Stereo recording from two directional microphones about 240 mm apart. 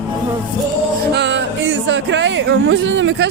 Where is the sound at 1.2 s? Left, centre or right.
Right.